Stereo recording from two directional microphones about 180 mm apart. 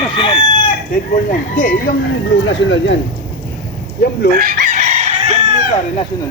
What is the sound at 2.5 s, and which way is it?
Speech, 90° left.